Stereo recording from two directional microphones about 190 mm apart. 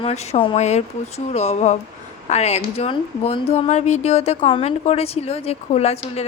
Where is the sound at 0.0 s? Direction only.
35° left (ahead or behind).